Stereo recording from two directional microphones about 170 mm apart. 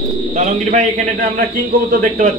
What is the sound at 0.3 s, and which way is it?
A man's voice, 50° right (ahead or behind).